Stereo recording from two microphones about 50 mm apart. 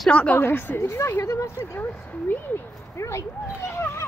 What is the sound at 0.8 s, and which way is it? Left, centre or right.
Speech, left.